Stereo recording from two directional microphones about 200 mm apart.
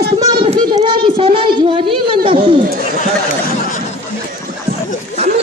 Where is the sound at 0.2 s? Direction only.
20° right (ahead or behind).